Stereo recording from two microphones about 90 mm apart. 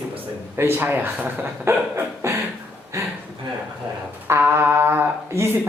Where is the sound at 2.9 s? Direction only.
30° right (ahead or behind).